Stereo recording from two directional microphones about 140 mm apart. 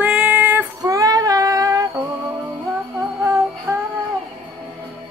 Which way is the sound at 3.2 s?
20° right (ahead or behind).